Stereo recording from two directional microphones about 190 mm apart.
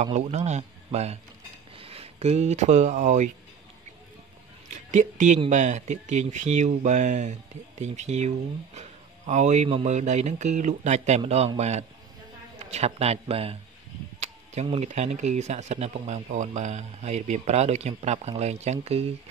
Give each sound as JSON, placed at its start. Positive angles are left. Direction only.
{"t": 0.0, "sound": "speech", "side_deg": -35}
{"t": 4.9, "sound": "speech", "side_deg": -40}